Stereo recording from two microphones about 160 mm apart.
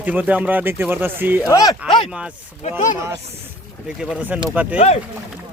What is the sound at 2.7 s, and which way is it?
Speech, 55° left (ahead or behind).